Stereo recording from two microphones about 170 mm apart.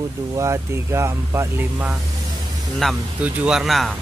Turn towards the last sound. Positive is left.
turn(degrees=0)  # may be behind; listen again after turning